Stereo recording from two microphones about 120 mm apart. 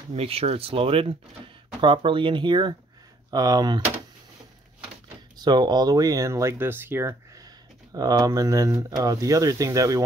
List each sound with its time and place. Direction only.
0.1 s speech: 55° right (ahead or behind); by 3.8 s 35° right (ahead or behind)
5.4 s speech: 35° right (ahead or behind)